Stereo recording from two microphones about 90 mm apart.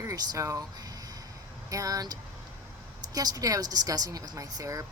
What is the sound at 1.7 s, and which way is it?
Speech, 40° right (ahead or behind).